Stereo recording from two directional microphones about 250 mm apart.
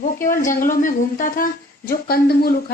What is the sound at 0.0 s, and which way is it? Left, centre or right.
A woman's voice, left.